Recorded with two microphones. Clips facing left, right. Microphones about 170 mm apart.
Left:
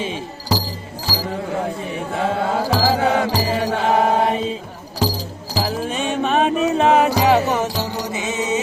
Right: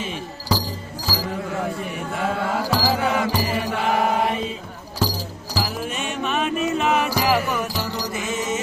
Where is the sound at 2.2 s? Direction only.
30° left (ahead or behind).